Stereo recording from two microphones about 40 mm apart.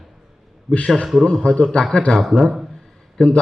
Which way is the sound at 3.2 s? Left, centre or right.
Centre.